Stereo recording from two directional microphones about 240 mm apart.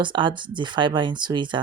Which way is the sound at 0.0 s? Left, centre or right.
Centre.